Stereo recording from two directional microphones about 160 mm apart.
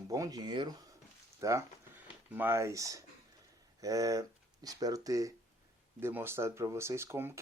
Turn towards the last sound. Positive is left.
turn(degrees=-15)  # may be behind; listen again after turning